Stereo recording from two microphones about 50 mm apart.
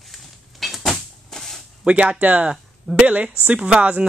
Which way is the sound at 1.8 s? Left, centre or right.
Right.